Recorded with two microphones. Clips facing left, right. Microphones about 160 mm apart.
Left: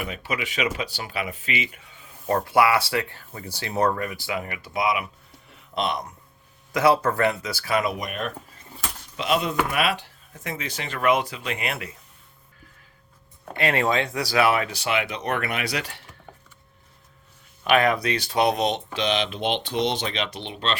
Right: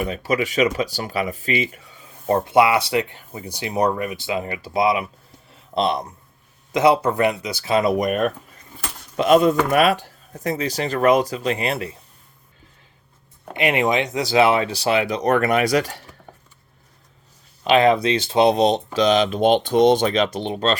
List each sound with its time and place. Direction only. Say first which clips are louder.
0.0 s speech: right 8 dB; 40° right (ahead or behind)
2.2 s speech: right 4 dB; 25° right (ahead or behind)
6.7 s speech: right 3 dB; 20° right (ahead or behind)
7.9 s speech: right 9 dB; 45° right (ahead or behind)
13.4 s speech: right 3 dB; 15° right (ahead or behind); by 16.0 s 40° right (ahead or behind)
17.6 s speech: right 5 dB; 25° right (ahead or behind); by 20.7 s 40° right (ahead or behind)